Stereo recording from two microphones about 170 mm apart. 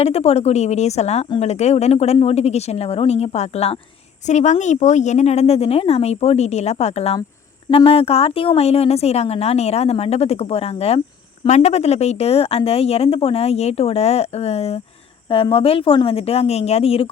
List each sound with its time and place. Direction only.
0.0 s a woman's voice: 35° left (ahead or behind)